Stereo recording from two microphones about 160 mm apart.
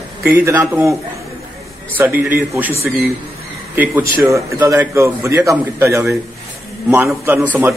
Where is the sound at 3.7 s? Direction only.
10° right (ahead or behind).